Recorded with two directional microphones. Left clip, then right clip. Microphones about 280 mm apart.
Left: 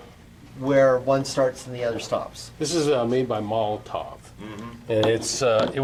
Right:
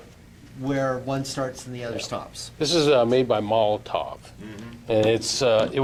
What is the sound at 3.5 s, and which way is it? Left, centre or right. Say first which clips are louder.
Speech: right 4 dB; centre.